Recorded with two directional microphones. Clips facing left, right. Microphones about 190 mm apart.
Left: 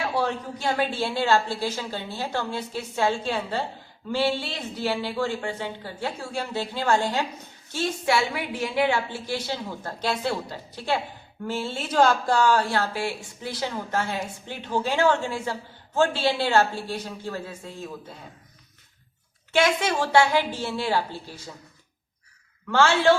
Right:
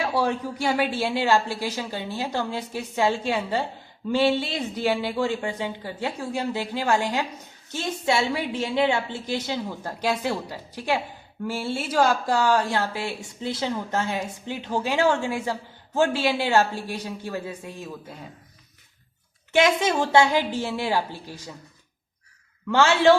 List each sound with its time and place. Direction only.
0.3 s a woman's voice: 10° right (ahead or behind)
19.5 s speech: 20° right (ahead or behind)
22.7 s speech: 15° right (ahead or behind)